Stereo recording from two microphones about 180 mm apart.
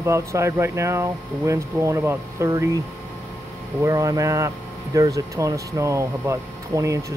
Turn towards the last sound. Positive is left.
turn(degrees=-15)  # may be behind; listen again after turning